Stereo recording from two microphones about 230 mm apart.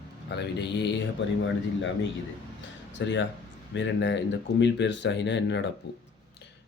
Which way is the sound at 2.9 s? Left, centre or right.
Left.